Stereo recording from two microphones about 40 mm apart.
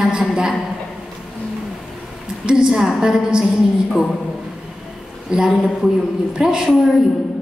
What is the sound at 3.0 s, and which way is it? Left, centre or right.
Speech, centre.